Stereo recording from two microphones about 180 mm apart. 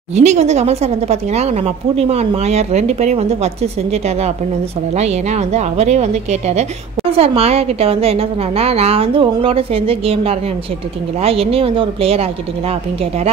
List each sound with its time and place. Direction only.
0.1 s a woman's voice: 40° right (ahead or behind)
4.9 s a woman's voice: 35° right (ahead or behind)
7.1 s a woman's voice: 35° right (ahead or behind)